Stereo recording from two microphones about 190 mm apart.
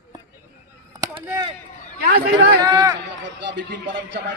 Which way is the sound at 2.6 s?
20° right (ahead or behind).